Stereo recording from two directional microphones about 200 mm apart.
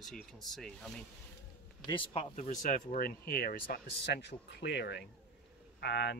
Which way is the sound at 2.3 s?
40° left (ahead or behind).